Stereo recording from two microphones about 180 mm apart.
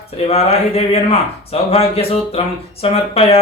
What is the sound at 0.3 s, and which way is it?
Speech, 35° left (ahead or behind).